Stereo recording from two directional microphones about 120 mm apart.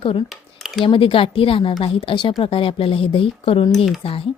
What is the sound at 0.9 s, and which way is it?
A woman's voice, 50° left (ahead or behind).